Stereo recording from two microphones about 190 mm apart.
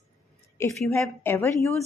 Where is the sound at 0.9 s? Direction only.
15° left (ahead or behind).